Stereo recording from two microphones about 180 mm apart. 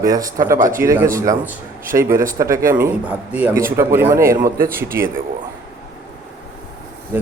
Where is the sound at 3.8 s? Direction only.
15° right (ahead or behind).